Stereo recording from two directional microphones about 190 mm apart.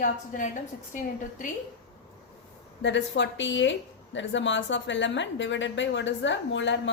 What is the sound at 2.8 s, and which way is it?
A woman's voice, 70° left (ahead or behind).